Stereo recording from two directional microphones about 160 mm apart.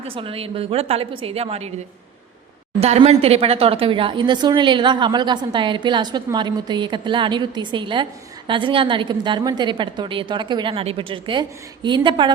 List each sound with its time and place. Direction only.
0.1 s a woman's voice: 35° right (ahead or behind)
2.8 s speech: 40° right (ahead or behind)